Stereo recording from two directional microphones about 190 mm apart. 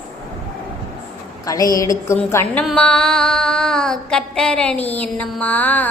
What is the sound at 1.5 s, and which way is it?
A woman's voice, 20° left (ahead or behind).